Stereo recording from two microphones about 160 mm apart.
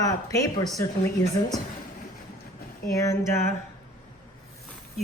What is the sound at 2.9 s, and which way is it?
Speech, 20° left (ahead or behind).